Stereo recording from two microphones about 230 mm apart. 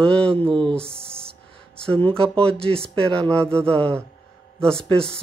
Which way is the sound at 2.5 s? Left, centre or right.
Right.